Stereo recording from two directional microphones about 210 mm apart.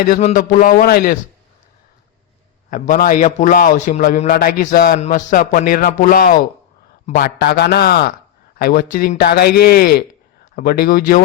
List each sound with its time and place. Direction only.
0.0 s a man's voice: 35° left (ahead or behind)
2.6 s a man's voice: 40° left (ahead or behind)